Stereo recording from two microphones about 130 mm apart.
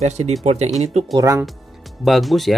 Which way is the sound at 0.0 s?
60° right (ahead or behind).